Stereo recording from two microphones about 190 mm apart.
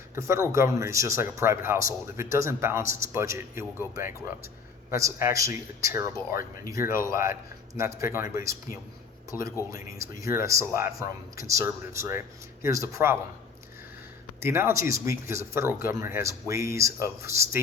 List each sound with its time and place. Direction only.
0.2 s speech: 15° right (ahead or behind)
14.4 s speech: 15° right (ahead or behind)